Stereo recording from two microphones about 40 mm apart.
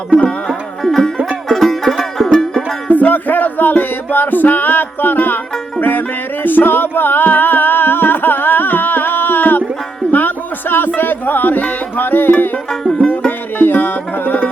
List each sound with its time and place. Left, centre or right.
0.8 s music: centre
2.9 s music: left
13.6 s music: left